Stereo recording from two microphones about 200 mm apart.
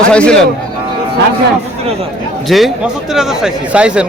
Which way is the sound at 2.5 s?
Centre (ahead or behind).